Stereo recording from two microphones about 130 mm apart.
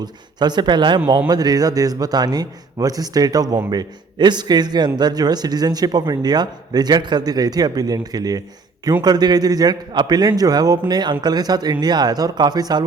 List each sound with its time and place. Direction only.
0.0 s a man's voice: 35° right (ahead or behind)